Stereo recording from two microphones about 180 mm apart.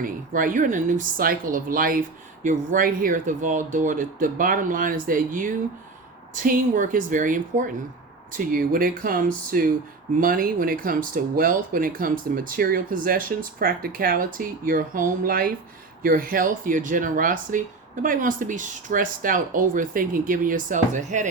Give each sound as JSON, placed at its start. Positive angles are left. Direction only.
{"t": 0.0, "sound": "speech", "side_deg": -50}